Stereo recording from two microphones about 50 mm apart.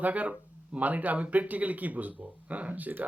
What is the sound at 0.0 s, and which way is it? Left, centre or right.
Speech, right.